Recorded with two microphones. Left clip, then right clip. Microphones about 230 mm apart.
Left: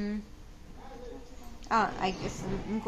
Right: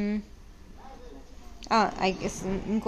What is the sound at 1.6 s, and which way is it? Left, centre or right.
Speech, right.